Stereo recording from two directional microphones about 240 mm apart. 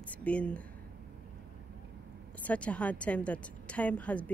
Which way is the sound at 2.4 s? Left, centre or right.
Centre.